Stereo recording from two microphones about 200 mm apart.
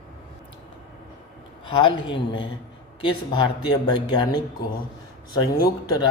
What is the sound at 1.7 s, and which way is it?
Speech, 25° left (ahead or behind).